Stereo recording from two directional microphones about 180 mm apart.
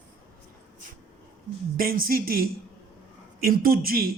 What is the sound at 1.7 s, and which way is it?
A man's voice, 55° right (ahead or behind).